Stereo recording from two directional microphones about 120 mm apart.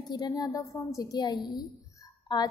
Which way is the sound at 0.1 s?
35° left (ahead or behind).